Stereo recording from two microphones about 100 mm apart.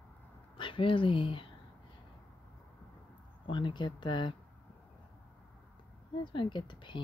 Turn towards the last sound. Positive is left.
turn(degrees=50)  # may be behind; listen again after turning